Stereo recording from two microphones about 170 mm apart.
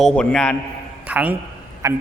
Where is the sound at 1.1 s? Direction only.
10° right (ahead or behind).